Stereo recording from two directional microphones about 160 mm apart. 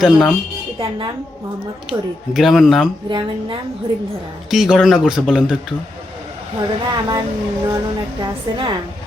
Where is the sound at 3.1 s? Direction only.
30° right (ahead or behind).